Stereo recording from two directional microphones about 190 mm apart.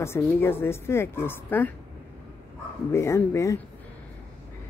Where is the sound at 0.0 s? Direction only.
10° left (ahead or behind).